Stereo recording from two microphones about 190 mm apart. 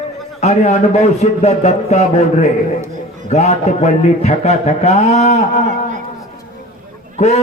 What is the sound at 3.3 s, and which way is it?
A man's voice, 35° left (ahead or behind).